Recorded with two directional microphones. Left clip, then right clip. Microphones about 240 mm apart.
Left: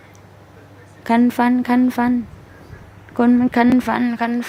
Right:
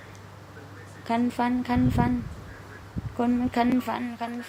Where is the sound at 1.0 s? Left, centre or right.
Left.